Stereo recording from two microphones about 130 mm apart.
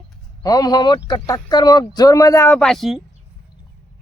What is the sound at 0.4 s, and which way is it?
Speech, 30° left (ahead or behind).